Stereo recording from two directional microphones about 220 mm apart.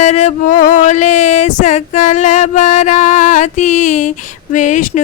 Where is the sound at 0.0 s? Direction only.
30° left (ahead or behind).